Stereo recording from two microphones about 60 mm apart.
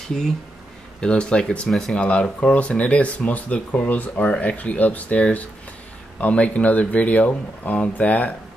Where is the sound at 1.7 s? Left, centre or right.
Centre.